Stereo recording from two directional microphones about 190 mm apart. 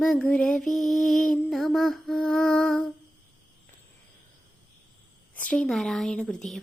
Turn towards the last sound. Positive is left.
turn(degrees=5)  # may be behind; listen again after turning